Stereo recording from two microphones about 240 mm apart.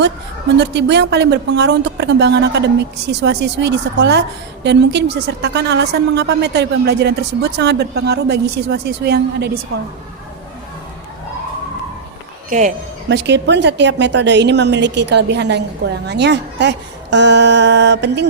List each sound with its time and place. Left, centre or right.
0.5 s a woman's voice: right
12.5 s speech: right
13.1 s a woman's voice: right